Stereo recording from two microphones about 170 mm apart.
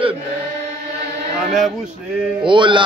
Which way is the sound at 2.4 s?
30° right (ahead or behind).